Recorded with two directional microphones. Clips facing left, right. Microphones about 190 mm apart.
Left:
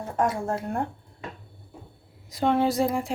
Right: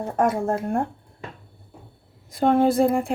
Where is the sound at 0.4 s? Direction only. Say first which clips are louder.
Right 5 dB; 50° right (ahead or behind).